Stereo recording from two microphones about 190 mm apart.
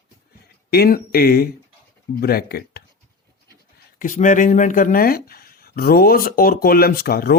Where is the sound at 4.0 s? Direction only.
40° left (ahead or behind).